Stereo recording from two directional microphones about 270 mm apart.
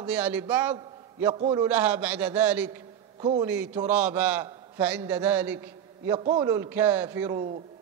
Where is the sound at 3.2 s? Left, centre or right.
Centre.